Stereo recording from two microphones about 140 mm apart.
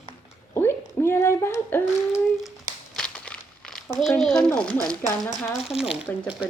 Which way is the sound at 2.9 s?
5° left (ahead or behind).